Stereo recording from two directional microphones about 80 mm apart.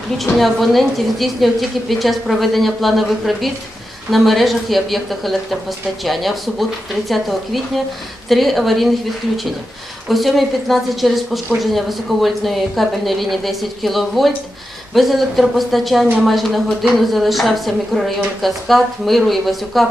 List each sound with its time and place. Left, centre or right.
0.2 s a woman's voice: centre
10.0 s a woman's voice: centre